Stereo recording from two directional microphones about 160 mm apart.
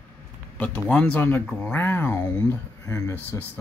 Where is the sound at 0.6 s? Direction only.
5° left (ahead or behind).